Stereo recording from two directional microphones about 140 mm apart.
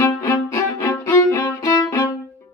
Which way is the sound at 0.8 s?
20° left (ahead or behind).